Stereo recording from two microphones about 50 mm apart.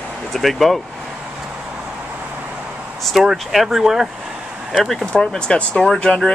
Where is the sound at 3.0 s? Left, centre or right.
Centre.